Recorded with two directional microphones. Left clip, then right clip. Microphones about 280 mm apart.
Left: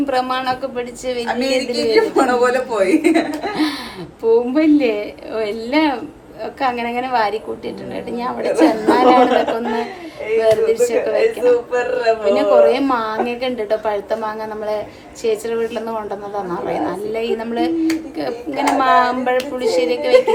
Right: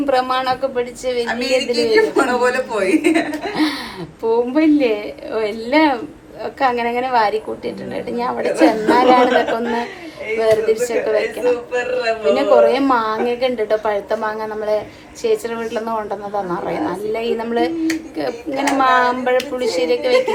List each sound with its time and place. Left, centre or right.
0.0 s a woman's voice: centre
1.3 s speech: centre
3.5 s a woman's voice: centre